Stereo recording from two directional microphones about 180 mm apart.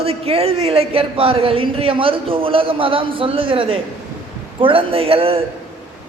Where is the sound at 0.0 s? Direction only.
35° right (ahead or behind).